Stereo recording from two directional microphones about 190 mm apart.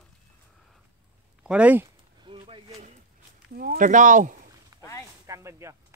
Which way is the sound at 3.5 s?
50° right (ahead or behind).